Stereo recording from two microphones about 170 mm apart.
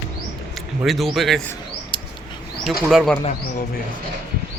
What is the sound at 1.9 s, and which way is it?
Mouse, 30° left (ahead or behind).